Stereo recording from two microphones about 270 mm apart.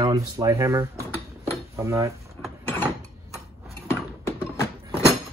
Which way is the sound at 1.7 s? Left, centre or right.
Centre.